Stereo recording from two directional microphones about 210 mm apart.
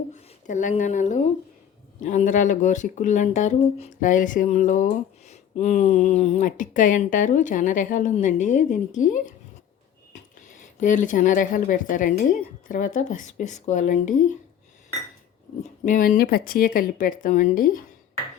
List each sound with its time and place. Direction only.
0.4 s speech: 35° left (ahead or behind)
10.8 s speech: 35° left (ahead or behind)
15.9 s speech: 40° left (ahead or behind)